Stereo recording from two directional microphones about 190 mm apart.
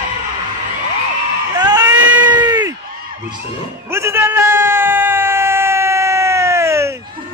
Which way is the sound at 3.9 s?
15° right (ahead or behind).